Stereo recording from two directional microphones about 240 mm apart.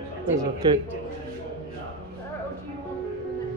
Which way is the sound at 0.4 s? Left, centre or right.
Centre.